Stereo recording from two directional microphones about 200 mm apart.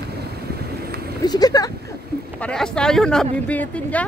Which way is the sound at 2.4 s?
5° left (ahead or behind).